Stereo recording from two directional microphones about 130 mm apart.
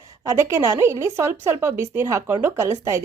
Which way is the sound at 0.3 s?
20° right (ahead or behind).